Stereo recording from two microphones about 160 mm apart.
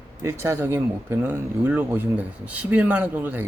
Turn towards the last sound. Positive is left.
turn(degrees=-10)  # may be behind; listen again after turning